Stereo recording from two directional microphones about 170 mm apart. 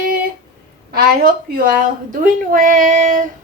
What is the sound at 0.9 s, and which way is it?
A woman's voice, 60° right (ahead or behind).